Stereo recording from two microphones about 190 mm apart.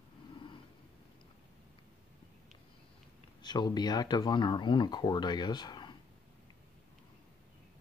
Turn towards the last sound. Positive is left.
turn(degrees=25)  # may be behind; listen again after turning